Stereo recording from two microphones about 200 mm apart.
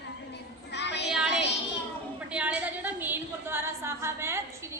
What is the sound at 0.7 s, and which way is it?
Speech, 60° left (ahead or behind).